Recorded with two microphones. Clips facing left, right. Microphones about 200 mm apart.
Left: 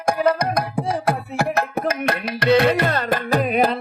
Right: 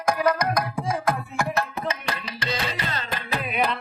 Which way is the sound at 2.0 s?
60° left (ahead or behind).